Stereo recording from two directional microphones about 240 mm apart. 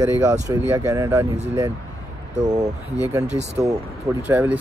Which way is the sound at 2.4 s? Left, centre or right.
Centre.